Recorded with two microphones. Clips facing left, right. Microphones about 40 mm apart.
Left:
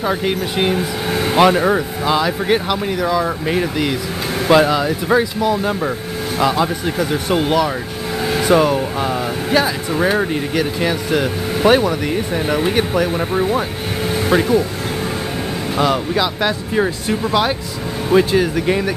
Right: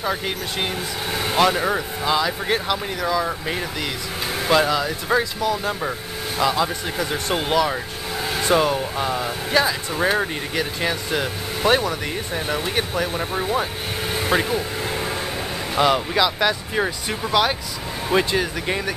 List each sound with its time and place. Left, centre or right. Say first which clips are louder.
0.0 s speech: left 6 dB; centre
15.8 s speech: left 1 dB; centre
16.2 s speech: left 1 dB; centre